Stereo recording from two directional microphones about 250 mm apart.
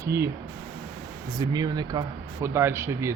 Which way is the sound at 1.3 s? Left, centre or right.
Centre.